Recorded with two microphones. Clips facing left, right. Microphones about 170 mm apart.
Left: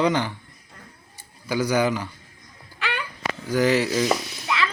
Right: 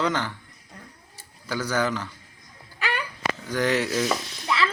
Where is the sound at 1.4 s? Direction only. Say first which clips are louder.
Left 4 dB; 15° left (ahead or behind).